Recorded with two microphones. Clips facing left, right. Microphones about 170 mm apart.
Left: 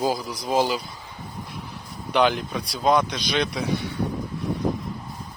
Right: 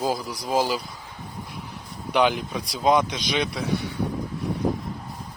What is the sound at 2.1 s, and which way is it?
Speech, 5° right (ahead or behind).